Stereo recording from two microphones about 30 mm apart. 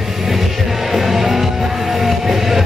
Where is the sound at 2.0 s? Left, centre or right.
Centre.